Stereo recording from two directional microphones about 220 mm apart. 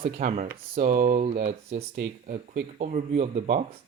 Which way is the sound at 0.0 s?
35° right (ahead or behind).